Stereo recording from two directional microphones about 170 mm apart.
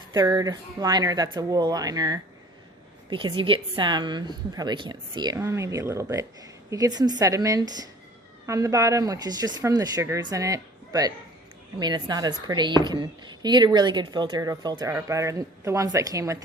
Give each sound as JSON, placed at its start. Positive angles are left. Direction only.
{"t": 0.1, "sound": "a woman's voice", "side_deg": -20}